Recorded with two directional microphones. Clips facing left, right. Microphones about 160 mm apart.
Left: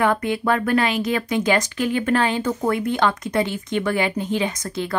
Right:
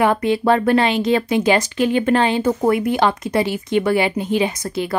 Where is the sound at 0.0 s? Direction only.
20° right (ahead or behind).